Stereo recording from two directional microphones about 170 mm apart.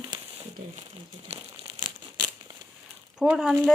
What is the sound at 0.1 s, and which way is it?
Crumpling, 25° right (ahead or behind).